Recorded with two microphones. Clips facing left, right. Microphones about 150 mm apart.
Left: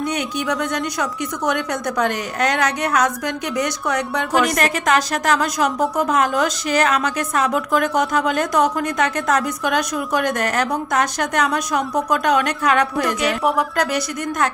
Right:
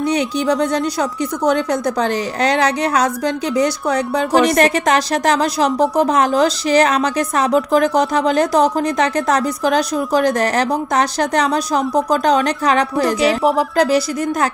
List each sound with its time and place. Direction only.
0.5 s a woman's voice: 30° right (ahead or behind)